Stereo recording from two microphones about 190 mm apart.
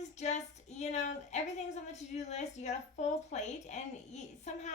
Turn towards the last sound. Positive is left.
turn(degrees=35)  # may be behind; listen again after turning